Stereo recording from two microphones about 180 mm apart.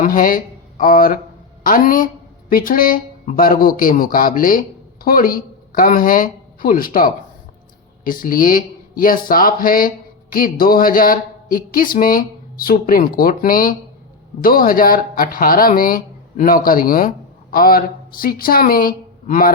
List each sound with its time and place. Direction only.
0.0 s speech: 50° left (ahead or behind)